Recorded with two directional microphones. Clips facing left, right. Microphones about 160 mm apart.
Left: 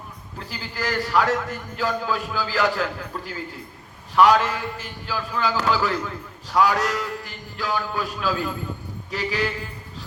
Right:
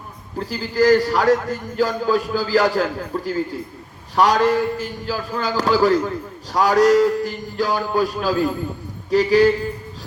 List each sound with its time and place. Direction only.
0.3 s a man's voice: 40° right (ahead or behind)